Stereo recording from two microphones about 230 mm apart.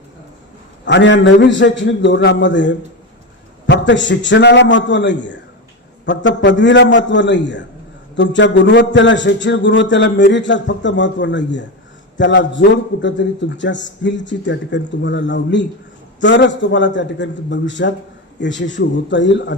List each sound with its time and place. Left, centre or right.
0.9 s a man's voice: left